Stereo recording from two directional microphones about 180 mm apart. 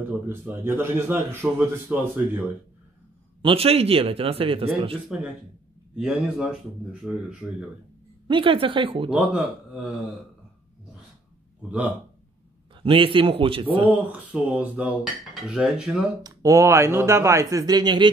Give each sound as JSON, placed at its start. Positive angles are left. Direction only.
{"t": 0.3, "sound": "a man's voice", "side_deg": -10}
{"t": 3.4, "sound": "a man's voice", "side_deg": -35}
{"t": 5.9, "sound": "speech", "side_deg": -5}
{"t": 8.3, "sound": "speech", "side_deg": -30}
{"t": 9.1, "sound": "speech", "side_deg": -5}
{"t": 12.8, "sound": "speech", "side_deg": -30}
{"t": 13.8, "sound": "a man's voice", "side_deg": -10}
{"t": 16.2, "sound": "a man's voice", "side_deg": -20}